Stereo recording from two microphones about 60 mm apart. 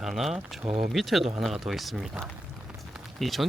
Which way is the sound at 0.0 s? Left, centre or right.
Centre.